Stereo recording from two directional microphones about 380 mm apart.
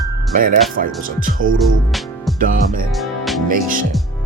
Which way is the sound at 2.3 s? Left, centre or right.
Right.